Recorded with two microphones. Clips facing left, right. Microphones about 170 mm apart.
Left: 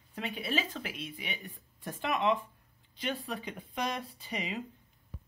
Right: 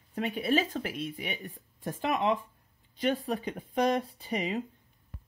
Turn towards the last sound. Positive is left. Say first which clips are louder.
# right 6 dB
turn(degrees=-45)  # may be behind; listen again after turning